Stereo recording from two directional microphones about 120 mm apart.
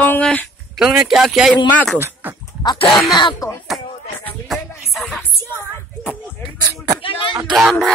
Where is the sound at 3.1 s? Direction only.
35° left (ahead or behind).